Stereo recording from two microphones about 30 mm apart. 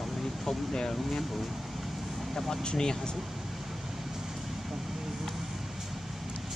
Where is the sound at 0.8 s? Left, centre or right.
Centre.